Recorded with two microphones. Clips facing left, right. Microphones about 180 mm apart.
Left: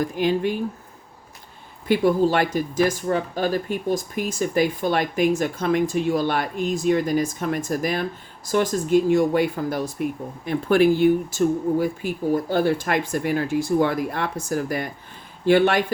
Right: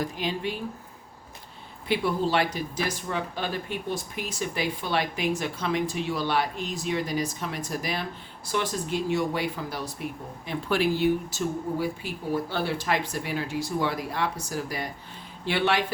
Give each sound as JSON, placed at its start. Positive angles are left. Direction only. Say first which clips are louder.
{"t": 0.0, "sound": "speech", "louder": "left 8 dB", "side_deg": 50}
{"t": 1.9, "sound": "speech", "louder": "left 7 dB", "side_deg": 45}